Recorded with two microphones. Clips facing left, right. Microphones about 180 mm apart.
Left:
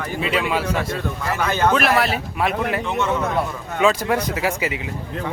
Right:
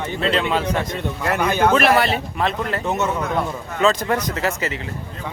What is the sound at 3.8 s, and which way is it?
Speech, 10° left (ahead or behind).